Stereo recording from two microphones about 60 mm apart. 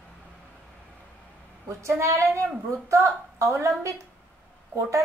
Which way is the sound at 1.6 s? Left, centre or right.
Right.